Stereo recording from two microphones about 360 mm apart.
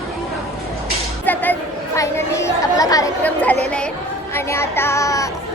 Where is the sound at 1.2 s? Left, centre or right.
Centre.